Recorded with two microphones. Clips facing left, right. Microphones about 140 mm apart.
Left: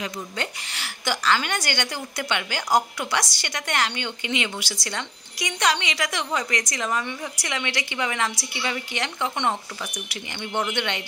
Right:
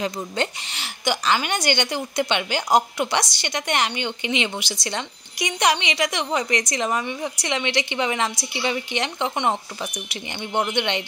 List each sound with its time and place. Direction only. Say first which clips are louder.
0.0 s a woman's voice: right 5 dB; 25° right (ahead or behind)